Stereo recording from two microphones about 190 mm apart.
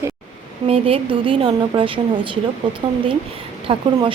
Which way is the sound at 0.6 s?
30° right (ahead or behind).